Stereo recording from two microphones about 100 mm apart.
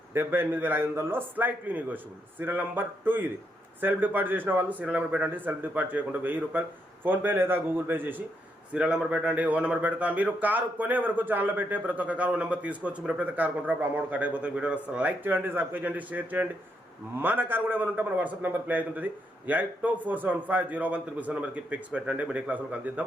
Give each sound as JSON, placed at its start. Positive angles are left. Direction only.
{"t": 0.1, "sound": "speech", "side_deg": -20}